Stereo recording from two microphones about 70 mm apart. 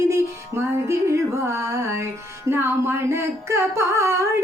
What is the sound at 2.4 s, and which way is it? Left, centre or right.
Carnatic music, right.